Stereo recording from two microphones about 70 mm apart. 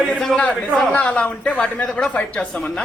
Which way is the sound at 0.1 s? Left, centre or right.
Centre.